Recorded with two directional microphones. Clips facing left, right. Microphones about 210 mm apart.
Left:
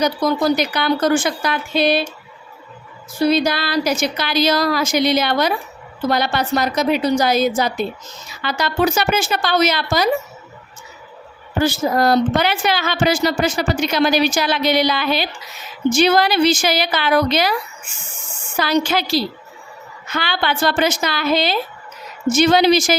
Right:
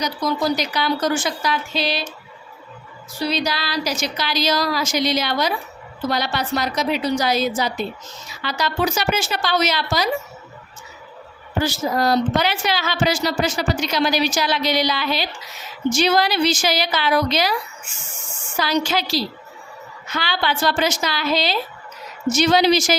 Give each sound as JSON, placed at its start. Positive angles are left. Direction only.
{"t": 0.0, "sound": "speech", "side_deg": 55}
{"t": 3.2, "sound": "a woman's voice", "side_deg": 50}
{"t": 11.6, "sound": "speech", "side_deg": 55}
{"t": 18.5, "sound": "a woman's voice", "side_deg": 55}